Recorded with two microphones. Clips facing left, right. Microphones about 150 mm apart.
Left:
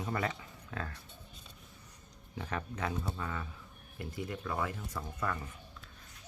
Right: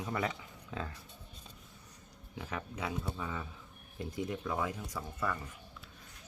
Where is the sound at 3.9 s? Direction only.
20° right (ahead or behind); by 5.4 s 5° right (ahead or behind).